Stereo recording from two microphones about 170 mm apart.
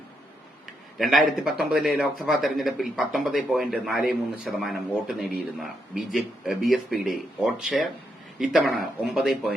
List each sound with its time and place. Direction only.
0.9 s speech: centre (ahead or behind)